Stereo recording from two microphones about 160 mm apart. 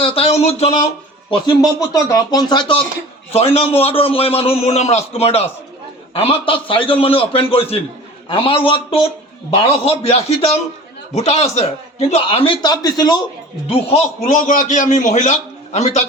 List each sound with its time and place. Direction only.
0.0 s a man's voice: 35° left (ahead or behind)
1.3 s a man's voice: 20° left (ahead or behind)
13.7 s a man's voice: 40° left (ahead or behind)